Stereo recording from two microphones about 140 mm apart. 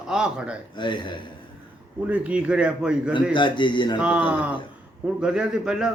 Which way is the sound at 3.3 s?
35° left (ahead or behind).